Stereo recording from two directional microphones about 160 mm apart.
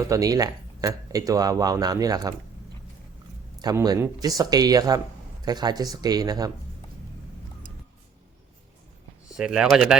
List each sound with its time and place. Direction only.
0.1 s speech: 20° right (ahead or behind)
3.6 s speech: 25° right (ahead or behind)
9.3 s speech: 5° right (ahead or behind)